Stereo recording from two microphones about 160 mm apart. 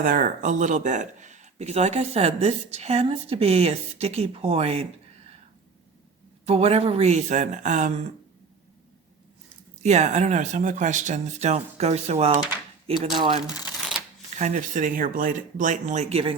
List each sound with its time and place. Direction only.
0.0 s speech: 55° right (ahead or behind); by 4.9 s 40° right (ahead or behind)
6.4 s speech: 40° right (ahead or behind)
9.8 s speech: 45° right (ahead or behind)
14.3 s speech: 50° right (ahead or behind)